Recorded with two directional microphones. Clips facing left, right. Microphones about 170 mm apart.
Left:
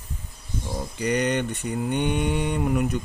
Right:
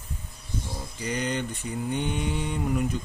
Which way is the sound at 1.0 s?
65° left (ahead or behind).